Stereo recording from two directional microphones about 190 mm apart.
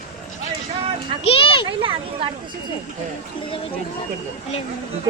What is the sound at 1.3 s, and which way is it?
Speech, 30° left (ahead or behind).